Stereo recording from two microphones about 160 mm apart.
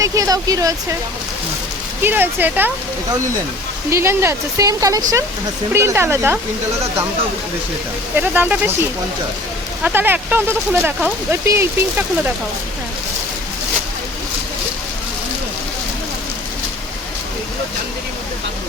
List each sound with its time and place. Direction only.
0.0 s speech: 20° right (ahead or behind)
2.0 s speech: 10° right (ahead or behind)
3.8 s speech: 15° right (ahead or behind)
8.3 s speech: 10° right (ahead or behind)